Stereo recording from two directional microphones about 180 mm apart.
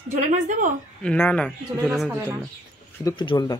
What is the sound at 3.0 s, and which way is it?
Speech, 20° left (ahead or behind).